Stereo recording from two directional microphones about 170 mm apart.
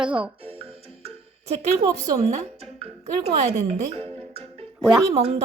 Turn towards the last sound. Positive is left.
turn(degrees=-35)  # may be behind; listen again after turning